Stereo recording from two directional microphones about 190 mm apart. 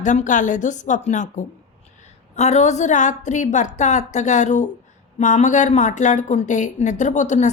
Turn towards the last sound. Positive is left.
turn(degrees=40)  # may be behind; listen again after turning